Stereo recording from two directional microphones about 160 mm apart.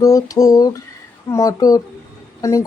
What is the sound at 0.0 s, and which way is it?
Speech, 20° left (ahead or behind).